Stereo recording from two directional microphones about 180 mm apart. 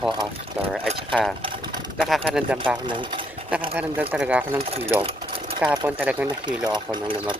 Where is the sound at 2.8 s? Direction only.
25° right (ahead or behind).